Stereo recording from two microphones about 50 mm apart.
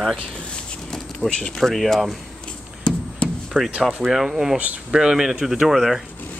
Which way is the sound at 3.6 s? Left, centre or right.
Right.